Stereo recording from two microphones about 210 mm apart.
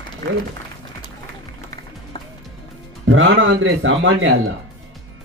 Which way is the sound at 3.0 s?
65° right (ahead or behind).